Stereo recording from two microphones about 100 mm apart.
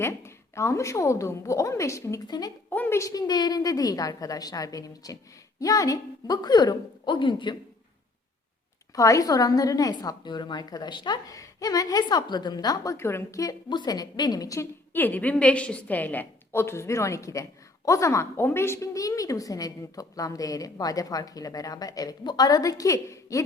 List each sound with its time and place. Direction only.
0.0 s a woman's voice: 25° left (ahead or behind); by 2.5 s 40° left (ahead or behind)
2.6 s a sound: 20° left (ahead or behind)
3.0 s a woman's voice: 40° left (ahead or behind)
7.1 s speech: 55° left (ahead or behind)
9.0 s a woman's voice: 35° left (ahead or behind)
13.0 s a woman's voice: 25° left (ahead or behind)
13.4 s a woman's voice: 45° left (ahead or behind)
14.9 s a woman's voice: 20° left (ahead or behind)